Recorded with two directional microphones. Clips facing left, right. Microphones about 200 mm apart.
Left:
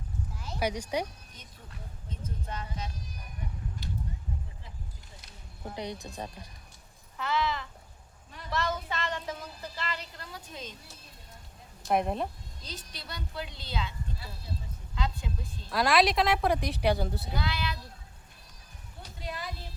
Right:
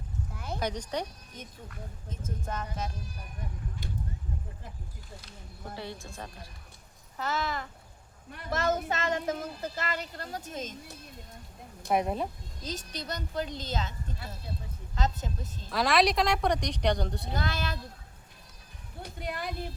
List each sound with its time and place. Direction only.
0.3 s a sound: 55° right (ahead or behind)
0.6 s speech: 10° left (ahead or behind)
2.0 s a woman's voice: 45° right (ahead or behind)
5.7 s speech: 20° left (ahead or behind)
7.2 s a woman's voice: 45° right (ahead or behind)
11.9 s speech: centre (ahead or behind)
12.6 s a woman's voice: 45° right (ahead or behind)
15.7 s speech: centre (ahead or behind)
17.3 s a woman's voice: 45° right (ahead or behind)
19.0 s a sound: 55° right (ahead or behind)